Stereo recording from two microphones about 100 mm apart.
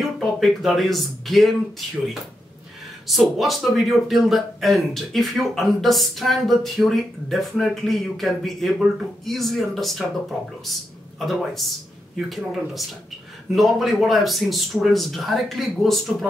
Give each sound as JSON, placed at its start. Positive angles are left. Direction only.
{"t": 0.0, "sound": "speech", "side_deg": 0}
{"t": 3.1, "sound": "a man's voice", "side_deg": 0}
{"t": 11.1, "sound": "a man's voice", "side_deg": 0}